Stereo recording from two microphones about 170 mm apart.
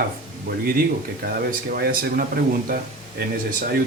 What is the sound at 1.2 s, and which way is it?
Speech, 60° right (ahead or behind).